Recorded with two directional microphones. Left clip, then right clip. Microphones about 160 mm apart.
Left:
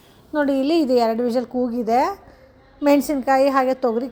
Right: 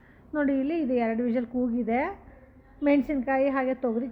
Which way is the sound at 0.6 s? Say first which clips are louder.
Left 9 dB; 45° left (ahead or behind).